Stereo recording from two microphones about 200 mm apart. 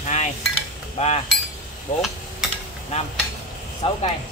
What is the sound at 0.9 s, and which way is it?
Chink, 35° left (ahead or behind).